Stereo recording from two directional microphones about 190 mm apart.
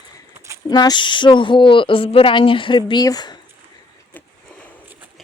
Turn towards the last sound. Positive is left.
turn(degrees=20)  # may be behind; listen again after turning